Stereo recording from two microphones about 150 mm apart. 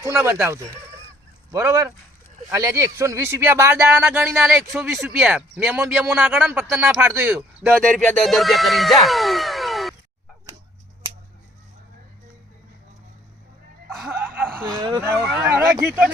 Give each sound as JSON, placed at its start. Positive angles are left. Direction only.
{"t": 0.0, "sound": "speech", "side_deg": -15}
{"t": 1.5, "sound": "speech", "side_deg": -20}
{"t": 4.9, "sound": "speech", "side_deg": 0}
{"t": 13.9, "sound": "music", "side_deg": 0}
{"t": 14.2, "sound": "a sound", "side_deg": -15}
{"t": 14.8, "sound": "speech", "side_deg": -25}
{"t": 15.4, "sound": "speech", "side_deg": -15}